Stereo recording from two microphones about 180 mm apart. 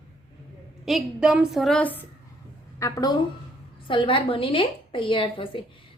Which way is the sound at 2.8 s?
20° left (ahead or behind).